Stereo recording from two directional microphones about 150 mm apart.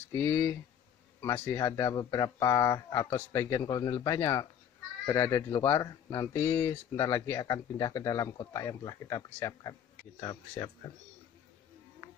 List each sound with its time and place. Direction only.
0.1 s speech: 15° left (ahead or behind)